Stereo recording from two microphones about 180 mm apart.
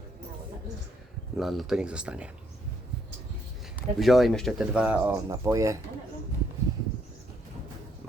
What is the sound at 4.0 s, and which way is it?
Speech, centre (ahead or behind).